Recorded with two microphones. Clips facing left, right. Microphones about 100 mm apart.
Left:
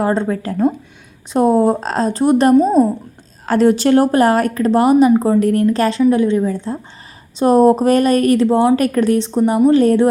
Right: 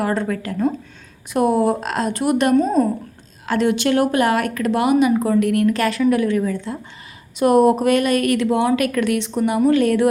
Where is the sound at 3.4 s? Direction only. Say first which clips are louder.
Left 5 dB; 40° left (ahead or behind).